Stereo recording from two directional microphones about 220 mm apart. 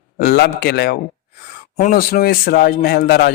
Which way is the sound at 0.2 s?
45° left (ahead or behind).